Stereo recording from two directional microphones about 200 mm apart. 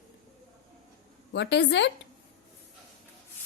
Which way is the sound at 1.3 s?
60° left (ahead or behind).